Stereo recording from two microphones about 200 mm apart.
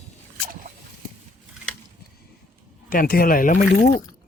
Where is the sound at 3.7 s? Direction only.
60° left (ahead or behind).